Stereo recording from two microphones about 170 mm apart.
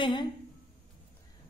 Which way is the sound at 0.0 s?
30° left (ahead or behind).